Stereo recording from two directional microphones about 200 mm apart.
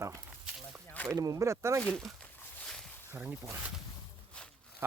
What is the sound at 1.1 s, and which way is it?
Speech, 15° right (ahead or behind).